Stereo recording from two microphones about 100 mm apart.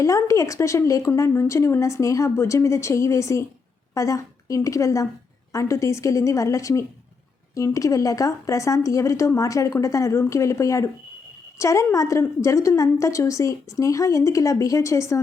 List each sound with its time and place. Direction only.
0.2 s a woman's voice: 30° left (ahead or behind)